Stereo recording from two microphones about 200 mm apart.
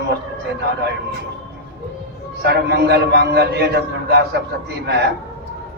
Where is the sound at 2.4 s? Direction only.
55° right (ahead or behind).